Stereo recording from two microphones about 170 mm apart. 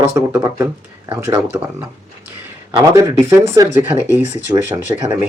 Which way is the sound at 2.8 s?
20° right (ahead or behind).